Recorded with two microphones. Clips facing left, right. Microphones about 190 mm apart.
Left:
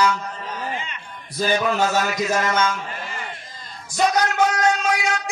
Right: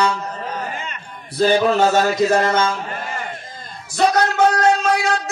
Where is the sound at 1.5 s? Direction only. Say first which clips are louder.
Right 4 dB; 30° right (ahead or behind).